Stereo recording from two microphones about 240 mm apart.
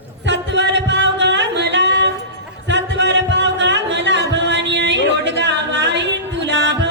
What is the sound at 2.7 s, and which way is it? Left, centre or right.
Music, right.